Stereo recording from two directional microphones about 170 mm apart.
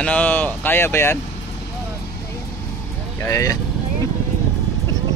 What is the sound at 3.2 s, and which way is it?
Speech, 20° left (ahead or behind).